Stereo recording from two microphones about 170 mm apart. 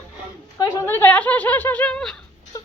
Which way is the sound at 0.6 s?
15° left (ahead or behind).